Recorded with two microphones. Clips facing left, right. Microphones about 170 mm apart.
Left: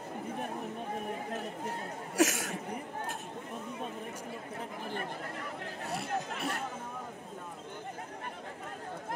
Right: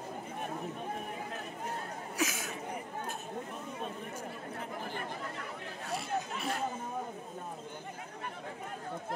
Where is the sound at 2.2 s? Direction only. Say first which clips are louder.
Left 7 dB; 75° left (ahead or behind).